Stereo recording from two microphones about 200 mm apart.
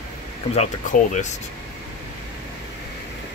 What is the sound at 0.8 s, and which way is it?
Speech, 40° left (ahead or behind).